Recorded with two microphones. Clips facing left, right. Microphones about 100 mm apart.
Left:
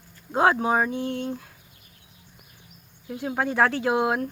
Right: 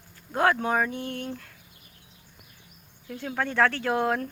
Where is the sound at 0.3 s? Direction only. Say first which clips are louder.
Left 3 dB; 20° left (ahead or behind).